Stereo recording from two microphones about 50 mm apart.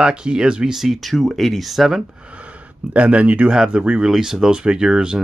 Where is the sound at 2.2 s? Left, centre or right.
Right.